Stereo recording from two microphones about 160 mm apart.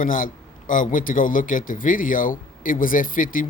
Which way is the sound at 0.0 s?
60° left (ahead or behind).